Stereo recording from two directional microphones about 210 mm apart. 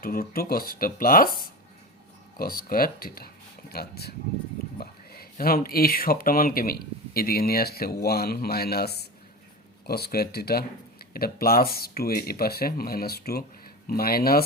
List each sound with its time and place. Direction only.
0.0 s speech: 45° left (ahead or behind)
2.4 s speech: 45° left (ahead or behind)